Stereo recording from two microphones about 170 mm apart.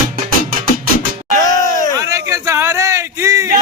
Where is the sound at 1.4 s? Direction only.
20° left (ahead or behind).